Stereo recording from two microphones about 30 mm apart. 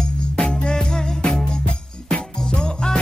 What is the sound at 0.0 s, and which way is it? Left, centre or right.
Music, left.